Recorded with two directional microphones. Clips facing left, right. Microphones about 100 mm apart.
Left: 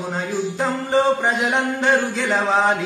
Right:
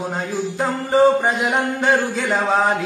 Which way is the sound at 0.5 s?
5° right (ahead or behind).